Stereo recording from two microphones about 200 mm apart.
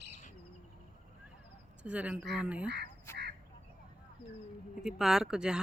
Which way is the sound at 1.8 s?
5° right (ahead or behind).